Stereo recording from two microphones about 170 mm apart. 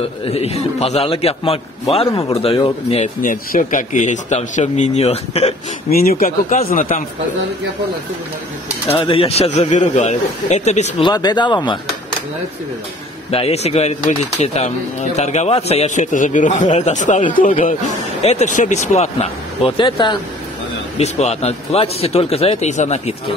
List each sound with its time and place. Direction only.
0.2 s a man's voice: 40° left (ahead or behind)
3.2 s a man's voice: 50° left (ahead or behind)
5.9 s speech: 60° left (ahead or behind)
6.2 s a man's voice: 40° left (ahead or behind)
6.7 s a man's voice: 50° left (ahead or behind)
8.8 s a man's voice: 35° left (ahead or behind)
11.0 s speech: 25° left (ahead or behind)
13.3 s a man's voice: 35° left (ahead or behind)
21.0 s a man's voice: 40° left (ahead or behind)